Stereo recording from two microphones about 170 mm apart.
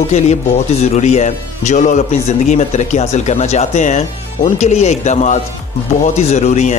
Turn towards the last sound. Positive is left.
turn(degrees=40)  # may be behind; listen again after turning